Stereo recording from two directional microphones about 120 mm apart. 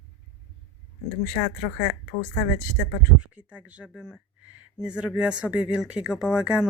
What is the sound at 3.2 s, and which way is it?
Speech, 10° right (ahead or behind).